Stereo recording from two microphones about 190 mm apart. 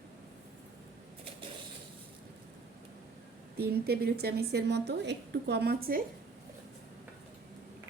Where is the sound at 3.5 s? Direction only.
55° right (ahead or behind).